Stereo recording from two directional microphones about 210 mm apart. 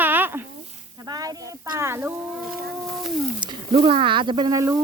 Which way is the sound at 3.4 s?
25° right (ahead or behind).